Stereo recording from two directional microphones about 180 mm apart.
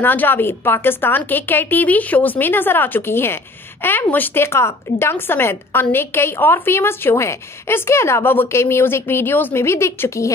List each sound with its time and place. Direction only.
0.0 s a woman's voice: 10° left (ahead or behind)